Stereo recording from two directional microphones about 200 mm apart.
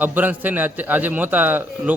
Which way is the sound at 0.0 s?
10° right (ahead or behind).